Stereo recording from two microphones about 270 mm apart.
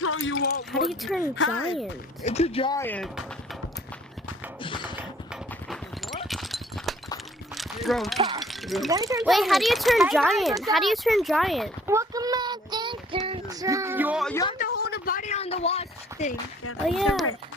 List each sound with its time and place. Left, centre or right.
0.0 s a sound: left
0.9 s a child's voice: centre
1.4 s speech: left
2.2 s speech: left; by 3.2 s centre
4.6 s typing: centre
4.9 s clip-clop: centre
6.2 s a sound: centre
8.4 s speech: centre
8.9 s a child's voice: centre
9.2 s a child's voice: centre
11.9 s child singing: centre
14.6 s a sound: left
16.9 s a child's voice: centre